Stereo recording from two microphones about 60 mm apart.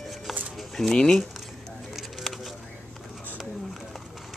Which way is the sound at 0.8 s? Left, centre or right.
Centre.